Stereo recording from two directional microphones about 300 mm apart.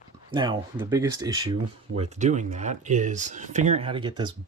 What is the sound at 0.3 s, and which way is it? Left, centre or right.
Speech, centre.